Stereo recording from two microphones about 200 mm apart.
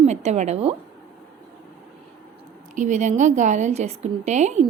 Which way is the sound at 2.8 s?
35° right (ahead or behind).